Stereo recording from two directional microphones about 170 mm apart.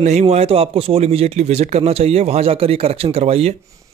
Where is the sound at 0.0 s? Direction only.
40° right (ahead or behind).